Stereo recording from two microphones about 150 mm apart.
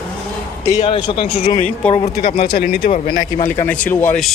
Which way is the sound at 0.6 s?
45° left (ahead or behind).